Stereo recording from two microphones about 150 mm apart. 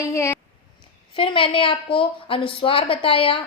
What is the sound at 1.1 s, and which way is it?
A woman's voice, 35° left (ahead or behind).